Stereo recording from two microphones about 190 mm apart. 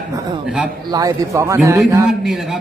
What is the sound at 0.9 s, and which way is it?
A man's voice, 20° right (ahead or behind).